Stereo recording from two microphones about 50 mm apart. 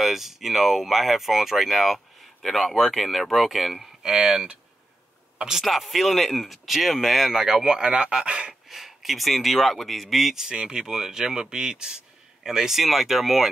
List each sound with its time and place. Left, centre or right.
0.0 s speech: centre
4.0 s speech: centre
8.6 s speech: centre